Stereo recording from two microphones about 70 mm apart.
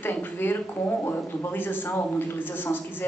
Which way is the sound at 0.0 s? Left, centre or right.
Left.